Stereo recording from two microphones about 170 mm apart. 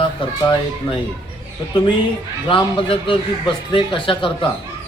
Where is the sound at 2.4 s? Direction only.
30° left (ahead or behind).